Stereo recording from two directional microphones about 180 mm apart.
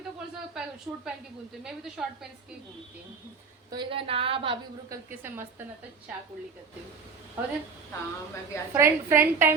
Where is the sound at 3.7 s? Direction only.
25° right (ahead or behind).